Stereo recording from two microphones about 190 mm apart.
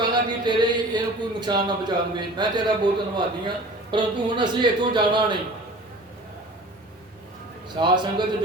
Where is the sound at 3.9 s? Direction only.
25° right (ahead or behind).